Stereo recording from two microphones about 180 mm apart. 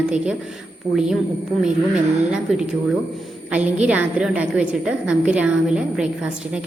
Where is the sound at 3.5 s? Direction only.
10° right (ahead or behind).